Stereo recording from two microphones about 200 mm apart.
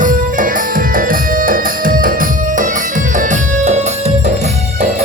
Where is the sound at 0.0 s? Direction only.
40° right (ahead or behind).